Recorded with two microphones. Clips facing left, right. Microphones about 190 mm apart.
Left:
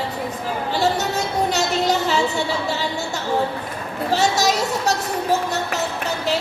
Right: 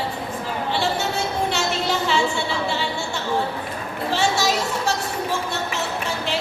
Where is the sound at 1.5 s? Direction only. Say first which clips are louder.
Left 3 dB; 40° left (ahead or behind).